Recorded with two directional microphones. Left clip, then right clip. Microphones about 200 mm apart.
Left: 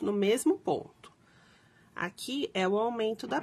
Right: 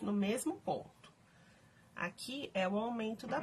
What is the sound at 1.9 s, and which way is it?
Speech, 50° left (ahead or behind).